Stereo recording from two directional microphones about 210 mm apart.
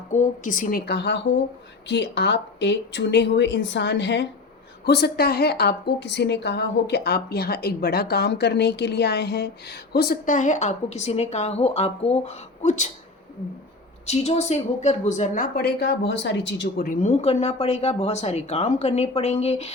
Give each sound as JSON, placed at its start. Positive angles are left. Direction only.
{"t": 0.1, "sound": "a woman's voice", "side_deg": 35}
{"t": 14.1, "sound": "a woman's voice", "side_deg": 30}